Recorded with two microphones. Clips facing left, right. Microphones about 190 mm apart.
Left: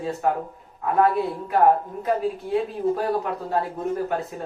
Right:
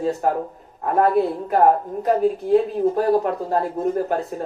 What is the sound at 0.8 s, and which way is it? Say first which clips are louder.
A woman's voice: right 3 dB; 45° right (ahead or behind).